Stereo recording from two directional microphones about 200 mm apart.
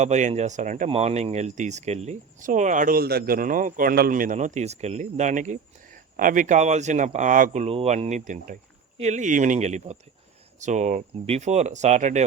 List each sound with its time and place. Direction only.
0.0 s speech: 35° right (ahead or behind)